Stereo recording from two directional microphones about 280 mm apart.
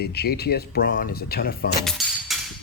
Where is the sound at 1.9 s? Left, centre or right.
Centre.